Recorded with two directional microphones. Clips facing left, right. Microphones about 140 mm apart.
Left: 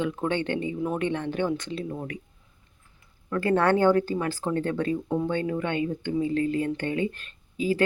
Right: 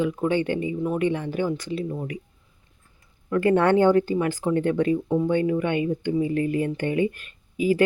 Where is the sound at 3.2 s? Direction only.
20° right (ahead or behind).